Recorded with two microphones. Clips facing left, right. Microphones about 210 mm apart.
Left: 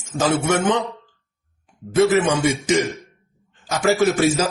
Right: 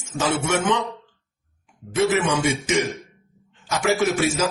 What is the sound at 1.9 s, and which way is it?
A man's voice, 35° left (ahead or behind).